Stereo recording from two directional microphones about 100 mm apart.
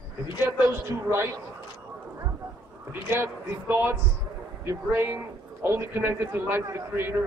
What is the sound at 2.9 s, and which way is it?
Speech, 20° right (ahead or behind).